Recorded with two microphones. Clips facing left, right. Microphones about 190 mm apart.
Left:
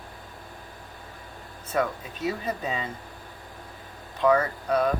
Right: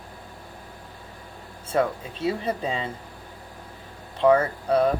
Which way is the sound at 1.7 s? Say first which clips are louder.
Right 3 dB; 30° right (ahead or behind).